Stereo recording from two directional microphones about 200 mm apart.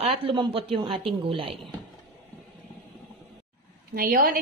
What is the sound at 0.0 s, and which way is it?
A woman's voice, 25° right (ahead or behind).